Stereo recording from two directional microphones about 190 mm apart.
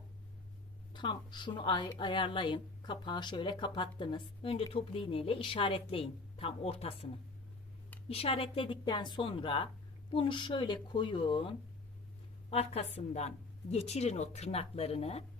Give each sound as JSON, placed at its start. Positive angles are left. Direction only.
{"t": 0.9, "sound": "speech", "side_deg": 25}
{"t": 8.1, "sound": "a woman's voice", "side_deg": 30}